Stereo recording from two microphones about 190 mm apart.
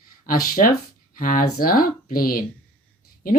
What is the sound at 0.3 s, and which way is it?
Speech, 50° left (ahead or behind).